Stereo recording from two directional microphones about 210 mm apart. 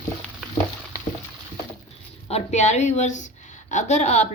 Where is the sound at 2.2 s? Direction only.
30° left (ahead or behind).